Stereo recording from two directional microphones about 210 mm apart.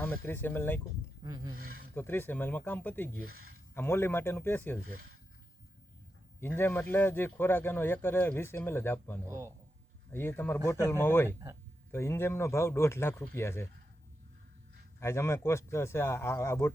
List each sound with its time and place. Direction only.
0.0 s speech: 10° left (ahead or behind)
1.2 s speech: 20° right (ahead or behind)
1.5 s speech: 45° right (ahead or behind)
2.0 s speech: 10° left (ahead or behind)
6.4 s speech: 10° left (ahead or behind)
9.2 s speech: 15° right (ahead or behind)
10.1 s speech: 10° left (ahead or behind)
15.0 s speech: 10° left (ahead or behind)